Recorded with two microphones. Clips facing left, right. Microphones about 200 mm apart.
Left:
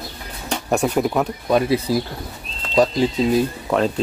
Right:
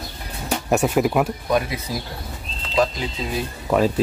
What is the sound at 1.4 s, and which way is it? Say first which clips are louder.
Speech: left 5 dB; 25° left (ahead or behind).